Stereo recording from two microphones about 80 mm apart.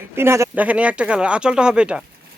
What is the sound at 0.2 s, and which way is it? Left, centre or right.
Speech, right.